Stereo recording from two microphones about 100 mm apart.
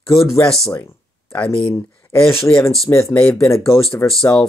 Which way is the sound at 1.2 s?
15° left (ahead or behind).